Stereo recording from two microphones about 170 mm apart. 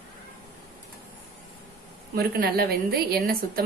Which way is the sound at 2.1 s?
65° right (ahead or behind).